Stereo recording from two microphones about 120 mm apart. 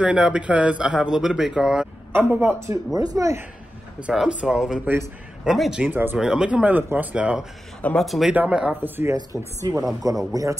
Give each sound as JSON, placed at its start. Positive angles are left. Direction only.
{"t": 0.0, "sound": "speech", "side_deg": -10}
{"t": 2.1, "sound": "speech", "side_deg": -20}
{"t": 4.0, "sound": "speech", "side_deg": -5}
{"t": 6.1, "sound": "speech", "side_deg": -5}
{"t": 7.8, "sound": "speech", "side_deg": 5}
{"t": 9.3, "sound": "speech", "side_deg": 0}
{"t": 10.3, "sound": "speech", "side_deg": -30}